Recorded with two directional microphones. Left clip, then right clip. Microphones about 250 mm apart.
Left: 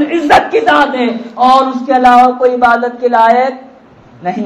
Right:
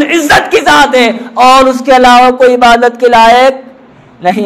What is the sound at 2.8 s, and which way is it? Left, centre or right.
Speech, right.